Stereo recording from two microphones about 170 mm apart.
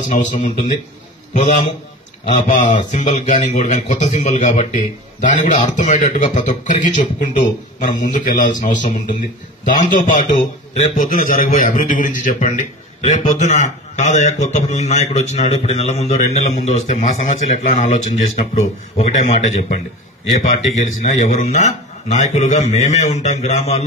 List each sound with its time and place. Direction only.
0.1 s a man's voice: 45° left (ahead or behind)